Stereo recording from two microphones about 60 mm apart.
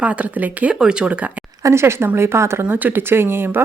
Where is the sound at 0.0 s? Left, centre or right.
Right.